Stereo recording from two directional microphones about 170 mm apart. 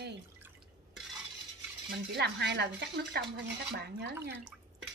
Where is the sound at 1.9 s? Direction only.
80° right.